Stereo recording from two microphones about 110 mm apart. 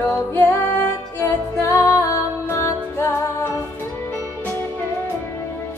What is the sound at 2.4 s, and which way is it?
Music, 25° left (ahead or behind).